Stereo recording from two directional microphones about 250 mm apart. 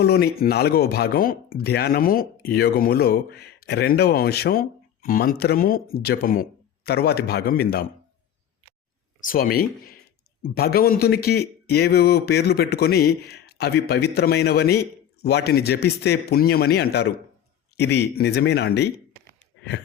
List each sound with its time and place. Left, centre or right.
0.0 s speech: left
9.2 s speech: left